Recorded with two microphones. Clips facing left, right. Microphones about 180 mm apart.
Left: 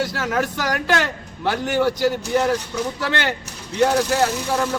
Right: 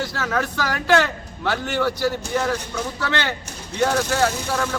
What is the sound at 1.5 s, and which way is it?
Speech, 15° left (ahead or behind).